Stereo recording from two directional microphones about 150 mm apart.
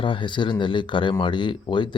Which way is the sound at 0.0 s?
35° left (ahead or behind).